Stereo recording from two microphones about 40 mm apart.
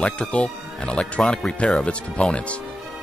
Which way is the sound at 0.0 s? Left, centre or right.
Left.